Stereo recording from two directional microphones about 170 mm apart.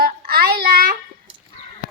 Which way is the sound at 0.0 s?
65° right (ahead or behind).